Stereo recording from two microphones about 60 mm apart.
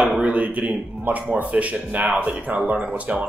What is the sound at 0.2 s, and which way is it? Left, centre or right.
A man's voice, right.